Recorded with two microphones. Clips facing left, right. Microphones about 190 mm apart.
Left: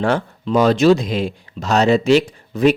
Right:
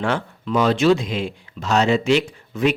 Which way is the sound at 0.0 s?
40° left (ahead or behind).